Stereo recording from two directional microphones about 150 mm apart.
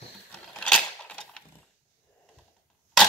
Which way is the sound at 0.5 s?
5° left (ahead or behind).